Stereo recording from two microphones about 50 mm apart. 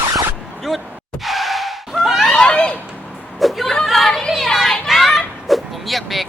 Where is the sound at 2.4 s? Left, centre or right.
Centre.